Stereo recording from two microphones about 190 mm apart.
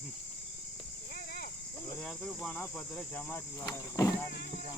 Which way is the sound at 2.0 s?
5° left (ahead or behind).